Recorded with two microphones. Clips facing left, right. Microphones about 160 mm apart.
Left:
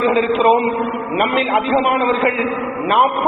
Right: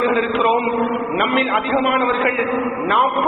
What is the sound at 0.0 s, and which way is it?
A man's voice, 20° left (ahead or behind).